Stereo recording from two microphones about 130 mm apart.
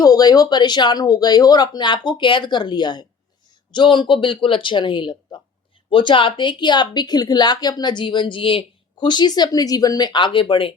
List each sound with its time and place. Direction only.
0.0 s a woman's voice: 30° left (ahead or behind)